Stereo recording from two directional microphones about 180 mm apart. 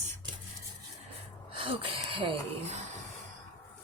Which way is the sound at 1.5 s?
30° right (ahead or behind).